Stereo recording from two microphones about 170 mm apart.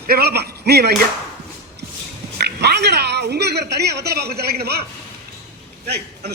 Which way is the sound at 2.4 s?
75° right (ahead or behind).